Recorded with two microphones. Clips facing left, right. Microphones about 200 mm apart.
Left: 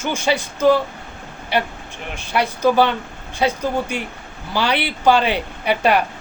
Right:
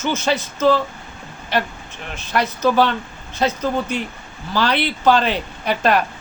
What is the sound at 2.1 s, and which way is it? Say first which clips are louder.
Speech: even; 10° left (ahead or behind).